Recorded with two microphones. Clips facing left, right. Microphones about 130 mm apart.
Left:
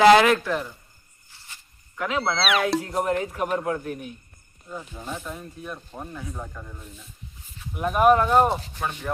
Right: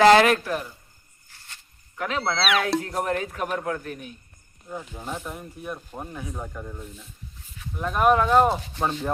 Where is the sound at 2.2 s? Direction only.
Centre (ahead or behind).